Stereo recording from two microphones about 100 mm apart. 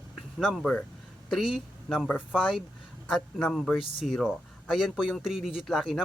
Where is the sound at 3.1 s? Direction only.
5° left (ahead or behind).